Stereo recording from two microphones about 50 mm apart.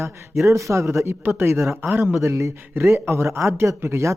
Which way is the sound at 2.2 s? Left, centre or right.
Right.